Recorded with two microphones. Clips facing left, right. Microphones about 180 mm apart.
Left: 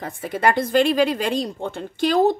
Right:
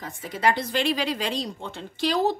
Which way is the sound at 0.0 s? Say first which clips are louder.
Left 4 dB; 55° left (ahead or behind).